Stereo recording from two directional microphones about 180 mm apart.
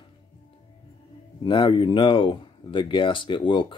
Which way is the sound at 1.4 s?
30° left (ahead or behind).